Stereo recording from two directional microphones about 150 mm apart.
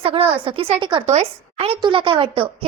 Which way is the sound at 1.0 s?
45° right (ahead or behind).